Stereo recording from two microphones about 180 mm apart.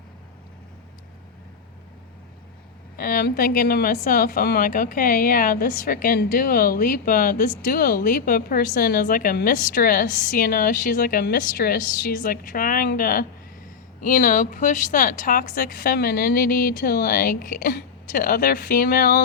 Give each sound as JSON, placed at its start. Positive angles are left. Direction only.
{"t": 2.9, "sound": "a woman's voice", "side_deg": 55}